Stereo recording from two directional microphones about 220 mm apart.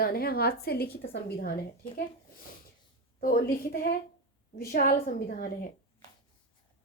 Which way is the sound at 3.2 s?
40° left (ahead or behind).